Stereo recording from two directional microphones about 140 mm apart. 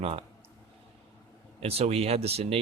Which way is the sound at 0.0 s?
45° right (ahead or behind).